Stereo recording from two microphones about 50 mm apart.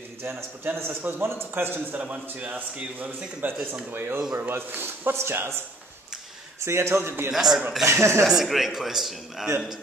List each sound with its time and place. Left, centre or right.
0.8 s a man's voice: right
5.1 s a man's voice: right
6.6 s a man's voice: right
7.2 s speech: centre
7.8 s a man's voice: right
8.2 s speech: centre